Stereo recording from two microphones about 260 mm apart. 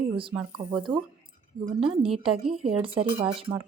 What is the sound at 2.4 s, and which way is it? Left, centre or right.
Speech, centre.